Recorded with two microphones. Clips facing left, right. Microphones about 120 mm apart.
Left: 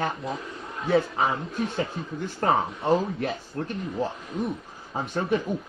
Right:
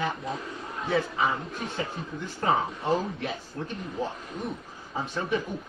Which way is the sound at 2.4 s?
50° left (ahead or behind).